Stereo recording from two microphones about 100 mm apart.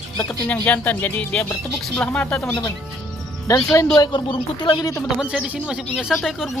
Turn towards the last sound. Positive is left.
turn(degrees=-5)  # may be behind; listen again after turning